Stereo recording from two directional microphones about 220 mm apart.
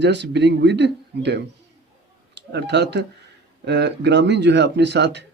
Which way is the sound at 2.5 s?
50° right (ahead or behind).